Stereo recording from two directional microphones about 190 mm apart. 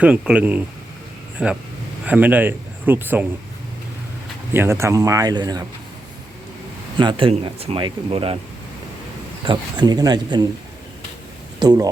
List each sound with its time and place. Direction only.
0.0 s a man's voice: 5° right (ahead or behind)
4.5 s a man's voice: 15° right (ahead or behind)
7.0 s speech: 25° right (ahead or behind)
9.4 s speech: 25° right (ahead or behind)
11.6 s speech: 20° right (ahead or behind)